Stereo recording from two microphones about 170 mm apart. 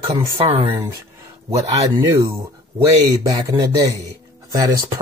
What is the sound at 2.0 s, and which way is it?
Speech, 15° right (ahead or behind).